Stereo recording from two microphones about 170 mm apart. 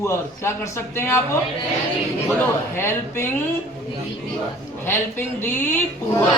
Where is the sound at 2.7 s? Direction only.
15° left (ahead or behind).